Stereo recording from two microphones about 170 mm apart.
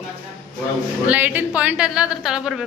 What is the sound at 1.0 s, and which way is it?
Speech, 10° right (ahead or behind).